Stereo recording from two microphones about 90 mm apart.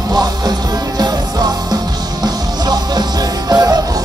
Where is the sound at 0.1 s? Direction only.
50° right (ahead or behind).